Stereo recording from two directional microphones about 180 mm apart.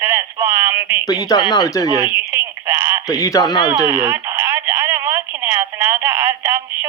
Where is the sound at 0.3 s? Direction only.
45° right (ahead or behind).